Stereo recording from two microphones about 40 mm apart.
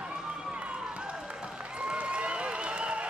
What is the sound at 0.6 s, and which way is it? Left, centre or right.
Applause, right.